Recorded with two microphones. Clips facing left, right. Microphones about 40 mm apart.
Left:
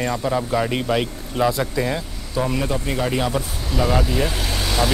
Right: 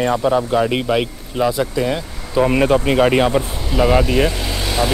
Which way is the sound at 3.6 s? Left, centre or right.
Right.